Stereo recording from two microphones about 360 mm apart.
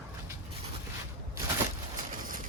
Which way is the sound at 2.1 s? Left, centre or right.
Right.